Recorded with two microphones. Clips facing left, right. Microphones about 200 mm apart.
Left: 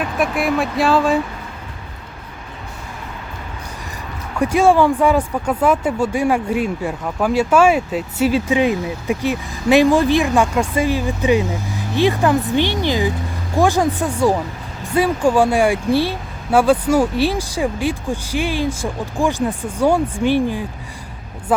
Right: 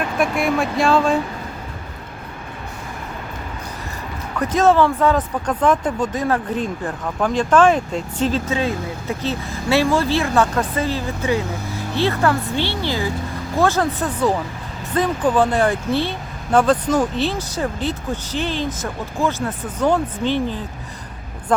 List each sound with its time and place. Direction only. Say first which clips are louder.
0.0 s speech: even; centre (ahead or behind)
4.4 s speech: left 2 dB; 10° left (ahead or behind)